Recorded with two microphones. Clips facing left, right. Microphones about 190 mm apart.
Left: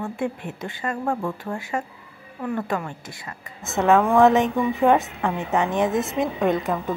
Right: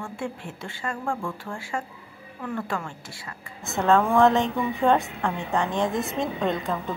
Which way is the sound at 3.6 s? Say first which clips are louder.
Left 3 dB; 20° left (ahead or behind).